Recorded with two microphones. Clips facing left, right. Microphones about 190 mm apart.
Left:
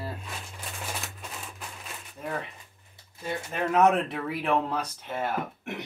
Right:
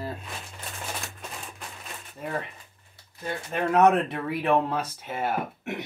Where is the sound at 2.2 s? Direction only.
5° right (ahead or behind).